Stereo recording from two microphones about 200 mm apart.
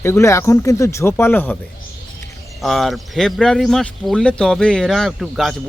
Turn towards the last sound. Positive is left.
turn(degrees=0)  # may be behind; listen again after turning